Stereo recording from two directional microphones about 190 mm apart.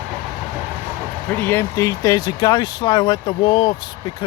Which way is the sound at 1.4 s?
10° left (ahead or behind).